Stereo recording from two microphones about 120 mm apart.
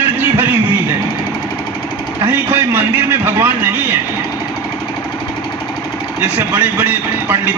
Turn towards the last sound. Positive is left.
turn(degrees=-15)  # may be behind; listen again after turning